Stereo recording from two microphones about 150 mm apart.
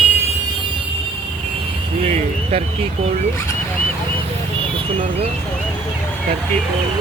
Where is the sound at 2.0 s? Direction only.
45° right (ahead or behind).